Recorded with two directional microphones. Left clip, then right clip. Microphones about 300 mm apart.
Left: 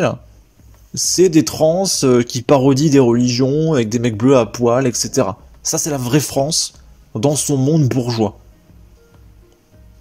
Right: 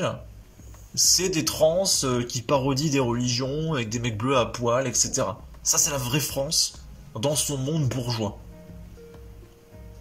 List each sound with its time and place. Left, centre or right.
0.9 s speech: left